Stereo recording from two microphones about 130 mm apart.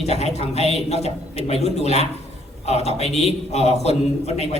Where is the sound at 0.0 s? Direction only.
55° left (ahead or behind).